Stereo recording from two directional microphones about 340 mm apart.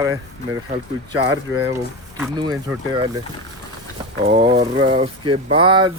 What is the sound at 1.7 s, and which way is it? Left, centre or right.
Speech, centre.